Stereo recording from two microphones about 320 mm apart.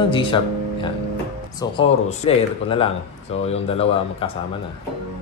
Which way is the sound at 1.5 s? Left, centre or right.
Centre.